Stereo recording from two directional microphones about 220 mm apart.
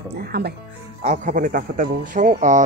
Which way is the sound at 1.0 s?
35° right (ahead or behind).